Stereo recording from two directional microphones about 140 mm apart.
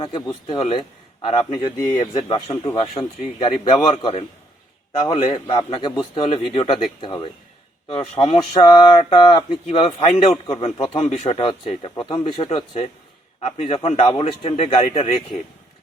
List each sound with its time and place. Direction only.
0.0 s a man's voice: 30° left (ahead or behind); by 8.4 s 50° left (ahead or behind)
8.5 s a man's voice: 30° left (ahead or behind)
9.6 s speech: 45° left (ahead or behind)